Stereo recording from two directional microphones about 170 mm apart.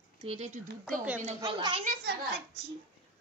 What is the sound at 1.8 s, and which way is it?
Speech, 50° right (ahead or behind).